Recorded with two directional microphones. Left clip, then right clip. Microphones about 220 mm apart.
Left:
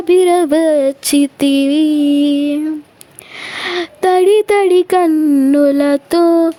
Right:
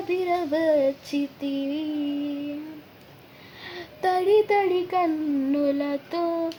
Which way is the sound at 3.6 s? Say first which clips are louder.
Left 11 dB; 45° left (ahead or behind).